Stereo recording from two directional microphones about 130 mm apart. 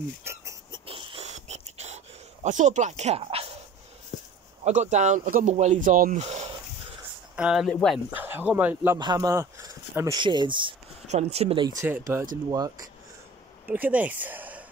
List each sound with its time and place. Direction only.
0.2 s a sound: 20° right (ahead or behind)
0.7 s a sound: 45° right (ahead or behind)
2.4 s speech: 65° right (ahead or behind); by 3.4 s 50° right (ahead or behind)
4.1 s a sound: 70° left (ahead or behind)
4.6 s speech: 65° right (ahead or behind); by 6.2 s 90° right
6.2 s a sound: 60° right (ahead or behind)
7.3 s speech: 5° right (ahead or behind)
8.1 s speech: 15° right (ahead or behind)
8.9 s speech: 30° right (ahead or behind)
10.1 s speech: 35° right (ahead or behind)
11.1 s speech: 55° right (ahead or behind)
11.8 s speech: 20° right (ahead or behind)
12.4 s speech: 30° right (ahead or behind)
13.7 s speech: 10° right (ahead or behind)